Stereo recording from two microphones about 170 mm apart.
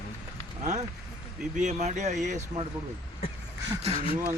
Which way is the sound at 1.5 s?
45° right (ahead or behind).